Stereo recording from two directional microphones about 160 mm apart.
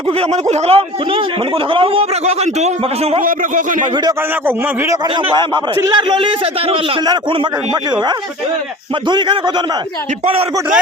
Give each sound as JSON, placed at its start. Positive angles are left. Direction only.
{"t": 0.2, "sound": "speech", "side_deg": -45}
{"t": 3.2, "sound": "a man's voice", "side_deg": -55}
{"t": 4.4, "sound": "a man's voice", "side_deg": -15}
{"t": 5.1, "sound": "speech", "side_deg": -30}